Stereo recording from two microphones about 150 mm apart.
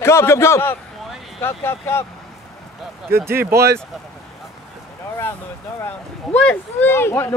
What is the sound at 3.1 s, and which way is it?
Speech, 15° right (ahead or behind).